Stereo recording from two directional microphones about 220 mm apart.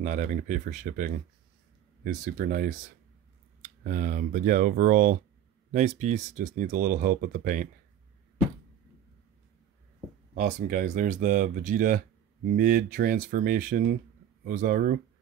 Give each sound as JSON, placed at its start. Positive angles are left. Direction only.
{"t": 0.0, "sound": "speech", "side_deg": -35}
{"t": 10.3, "sound": "speech", "side_deg": -35}